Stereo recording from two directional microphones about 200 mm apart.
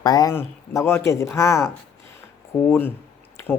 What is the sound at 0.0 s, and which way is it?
Speech, 20° left (ahead or behind).